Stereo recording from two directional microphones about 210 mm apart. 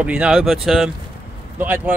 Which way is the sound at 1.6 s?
10° right (ahead or behind).